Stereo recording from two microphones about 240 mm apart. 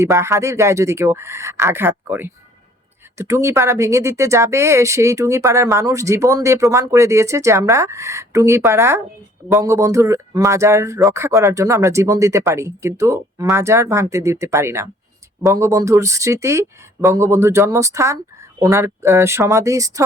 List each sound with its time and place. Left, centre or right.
0.0 s speech: centre